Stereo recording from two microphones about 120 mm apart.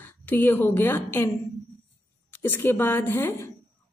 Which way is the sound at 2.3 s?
20° left (ahead or behind).